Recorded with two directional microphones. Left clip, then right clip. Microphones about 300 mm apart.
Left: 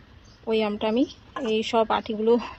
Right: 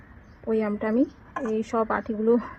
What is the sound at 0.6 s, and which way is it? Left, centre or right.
A woman's voice, centre.